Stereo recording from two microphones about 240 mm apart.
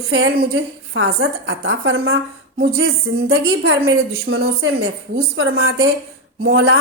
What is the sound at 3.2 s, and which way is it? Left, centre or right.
Speech, right.